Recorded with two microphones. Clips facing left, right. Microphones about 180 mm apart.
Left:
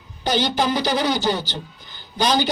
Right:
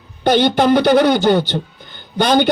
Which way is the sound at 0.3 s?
60° right (ahead or behind).